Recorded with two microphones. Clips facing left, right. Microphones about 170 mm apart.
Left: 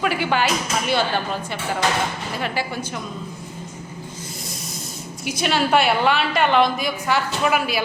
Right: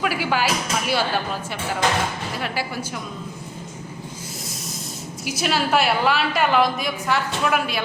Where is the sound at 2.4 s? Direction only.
5° right (ahead or behind).